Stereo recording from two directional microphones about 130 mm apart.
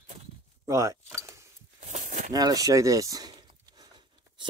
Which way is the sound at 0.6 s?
25° right (ahead or behind).